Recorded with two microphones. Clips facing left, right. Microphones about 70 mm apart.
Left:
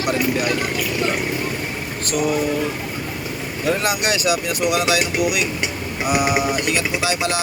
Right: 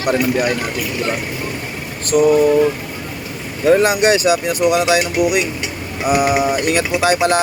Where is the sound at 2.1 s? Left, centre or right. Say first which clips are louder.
Right 8 dB; right.